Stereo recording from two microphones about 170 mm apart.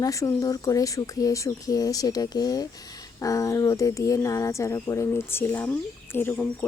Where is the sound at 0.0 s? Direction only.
20° left (ahead or behind).